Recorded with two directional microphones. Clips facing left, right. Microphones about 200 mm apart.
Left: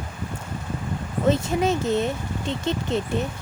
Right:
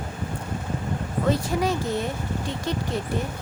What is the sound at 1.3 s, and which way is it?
Speech, 25° left (ahead or behind).